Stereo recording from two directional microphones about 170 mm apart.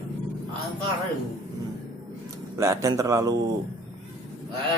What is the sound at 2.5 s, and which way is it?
Speech, 15° right (ahead or behind).